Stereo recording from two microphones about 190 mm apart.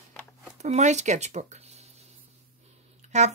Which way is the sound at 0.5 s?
35° right (ahead or behind).